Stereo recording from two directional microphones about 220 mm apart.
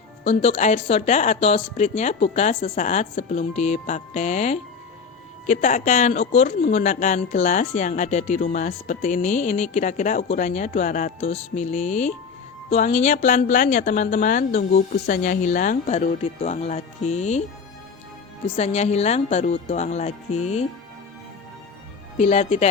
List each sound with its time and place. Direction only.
0.3 s speech: 30° left (ahead or behind)
18.5 s speech: 30° left (ahead or behind)
22.2 s speech: 30° left (ahead or behind)